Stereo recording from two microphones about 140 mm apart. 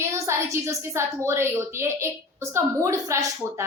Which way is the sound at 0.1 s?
20° right (ahead or behind).